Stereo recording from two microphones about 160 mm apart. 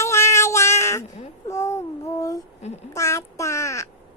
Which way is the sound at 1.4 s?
20° left (ahead or behind).